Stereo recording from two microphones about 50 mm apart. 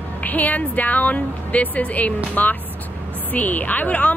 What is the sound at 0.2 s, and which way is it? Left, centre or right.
A woman's voice, left.